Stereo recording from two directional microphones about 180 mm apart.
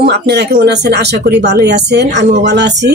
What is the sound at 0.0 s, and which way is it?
Speech, 65° right (ahead or behind).